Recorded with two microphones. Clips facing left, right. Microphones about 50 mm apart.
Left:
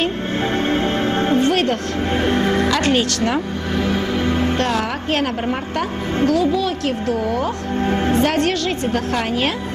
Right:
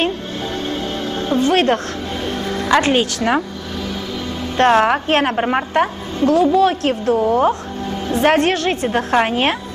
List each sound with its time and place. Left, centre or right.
0.6 s music: left
1.5 s speech: right
2.1 s speech: left
2.7 s a woman's voice: centre
3.8 s music: left
4.6 s a woman's voice: right
7.8 s a woman's voice: left
8.2 s a woman's voice: right